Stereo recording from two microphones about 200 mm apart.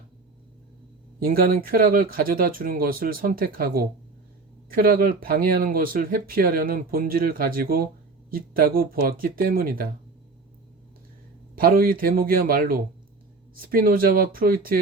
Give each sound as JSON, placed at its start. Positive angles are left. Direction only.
{"t": 1.2, "sound": "speech", "side_deg": -45}
{"t": 11.5, "sound": "speech", "side_deg": -45}